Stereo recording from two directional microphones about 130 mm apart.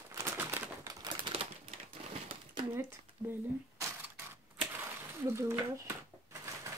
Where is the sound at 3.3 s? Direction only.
15° right (ahead or behind).